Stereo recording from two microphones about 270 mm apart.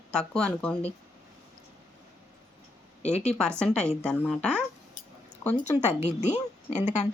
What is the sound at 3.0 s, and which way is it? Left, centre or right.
Speech, left.